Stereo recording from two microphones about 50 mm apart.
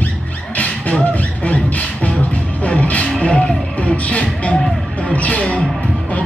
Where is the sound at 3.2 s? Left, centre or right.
Left.